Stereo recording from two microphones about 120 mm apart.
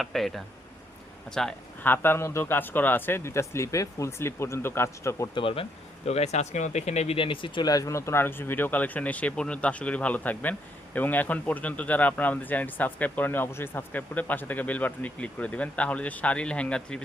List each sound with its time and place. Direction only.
0.0 s speech: centre (ahead or behind)
1.8 s a man's voice: 20° left (ahead or behind)
5.3 s speech: 50° left (ahead or behind)
6.1 s speech: 65° left (ahead or behind); by 17.0 s 10° left (ahead or behind)